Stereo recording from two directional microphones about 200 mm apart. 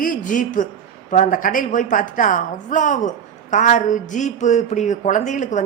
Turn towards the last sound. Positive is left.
turn(degrees=40)  # may be behind; listen again after turning